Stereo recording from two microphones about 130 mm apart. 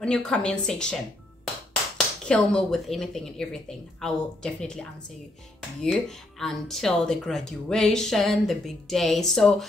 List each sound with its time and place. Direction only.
0.0 s a woman's voice: 5° left (ahead or behind)
2.2 s speech: 5° left (ahead or behind)